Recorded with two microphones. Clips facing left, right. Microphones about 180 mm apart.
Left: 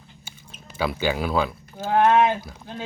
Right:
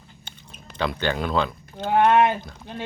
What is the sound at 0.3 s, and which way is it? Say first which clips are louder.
Speech: right 1 dB; 5° left (ahead or behind).